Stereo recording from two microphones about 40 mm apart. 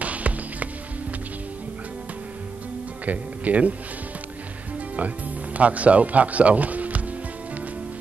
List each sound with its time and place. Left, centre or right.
0.0 s music: right
3.1 s speech: right
4.9 s speech: right